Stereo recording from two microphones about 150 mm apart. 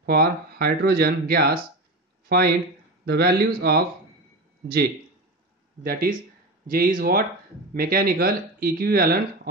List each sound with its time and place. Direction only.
0.0 s speech: 90° right
5.9 s speech: 70° right (ahead or behind); by 9.5 s 90° right